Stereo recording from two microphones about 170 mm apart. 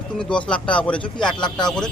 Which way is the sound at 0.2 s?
5° left (ahead or behind).